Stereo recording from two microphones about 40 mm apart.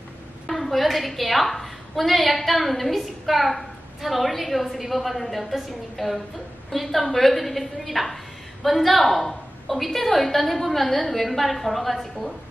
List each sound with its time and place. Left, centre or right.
0.5 s a woman's voice: centre